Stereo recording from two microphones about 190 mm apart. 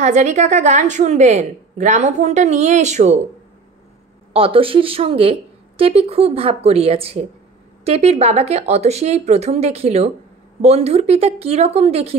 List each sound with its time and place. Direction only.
0.0 s a woman's voice: 40° right (ahead or behind)
4.3 s a woman's voice: 30° right (ahead or behind)